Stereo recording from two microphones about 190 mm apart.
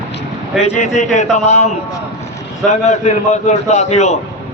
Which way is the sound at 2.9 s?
40° left (ahead or behind).